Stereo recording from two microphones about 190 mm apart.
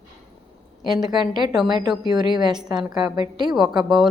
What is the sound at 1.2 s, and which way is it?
A woman's voice, 20° right (ahead or behind).